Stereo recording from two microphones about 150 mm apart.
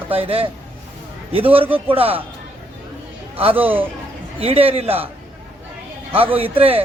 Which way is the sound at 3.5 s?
10° right (ahead or behind).